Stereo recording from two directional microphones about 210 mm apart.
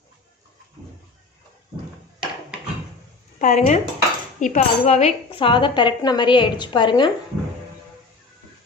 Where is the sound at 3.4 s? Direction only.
35° left (ahead or behind).